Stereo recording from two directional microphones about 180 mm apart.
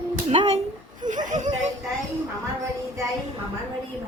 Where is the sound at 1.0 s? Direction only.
45° right (ahead or behind).